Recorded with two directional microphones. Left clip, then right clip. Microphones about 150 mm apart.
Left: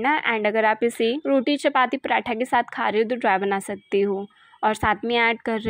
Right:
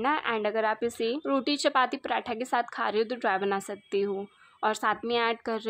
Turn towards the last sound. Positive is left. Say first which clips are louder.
# left 6 dB
turn(degrees=20)  # may be behind; listen again after turning